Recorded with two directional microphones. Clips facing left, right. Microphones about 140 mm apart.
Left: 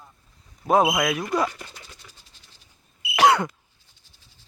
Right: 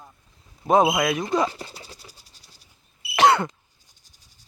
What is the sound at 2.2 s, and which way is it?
Mechanisms, 40° right (ahead or behind).